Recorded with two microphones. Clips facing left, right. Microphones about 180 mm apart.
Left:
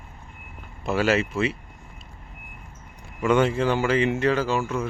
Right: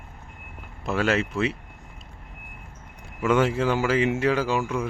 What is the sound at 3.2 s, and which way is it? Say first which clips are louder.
Speech: left 1 dB; 5° right (ahead or behind).